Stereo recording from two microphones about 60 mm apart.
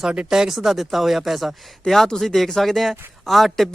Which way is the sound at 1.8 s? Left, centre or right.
Centre.